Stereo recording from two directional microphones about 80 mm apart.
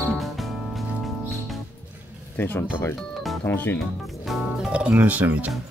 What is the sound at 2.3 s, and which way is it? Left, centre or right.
Speech, left.